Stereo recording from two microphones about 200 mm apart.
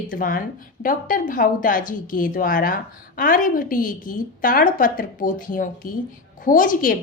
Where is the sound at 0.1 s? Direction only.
45° left (ahead or behind).